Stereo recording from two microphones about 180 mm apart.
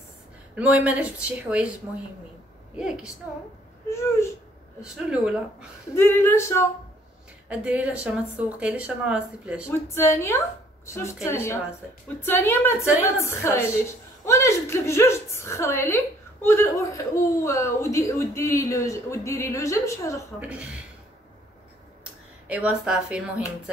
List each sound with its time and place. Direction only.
0.6 s speech: 10° right (ahead or behind)
2.8 s speech: 5° right (ahead or behind)
3.9 s a man's voice: 15° left (ahead or behind)
4.9 s speech: 5° right (ahead or behind)
5.9 s a man's voice: 15° left (ahead or behind)
7.4 s speech: 10° right (ahead or behind)
9.7 s a man's voice: 15° left (ahead or behind)
20.3 s speech: 5° right (ahead or behind)
22.5 s speech: 5° right (ahead or behind)